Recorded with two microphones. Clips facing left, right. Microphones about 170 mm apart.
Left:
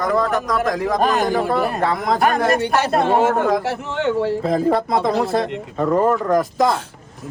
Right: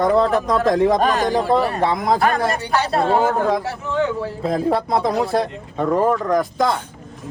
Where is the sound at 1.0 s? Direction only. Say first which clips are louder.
Even; 5° left (ahead or behind).